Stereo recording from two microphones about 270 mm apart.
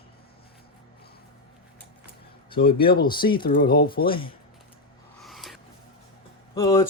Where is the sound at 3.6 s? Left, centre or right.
Left.